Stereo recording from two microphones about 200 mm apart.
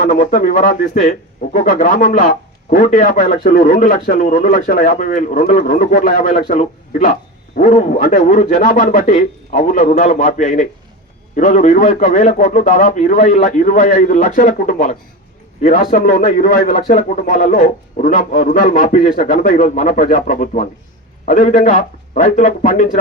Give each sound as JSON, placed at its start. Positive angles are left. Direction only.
{"t": 0.0, "sound": "a man's voice", "side_deg": 40}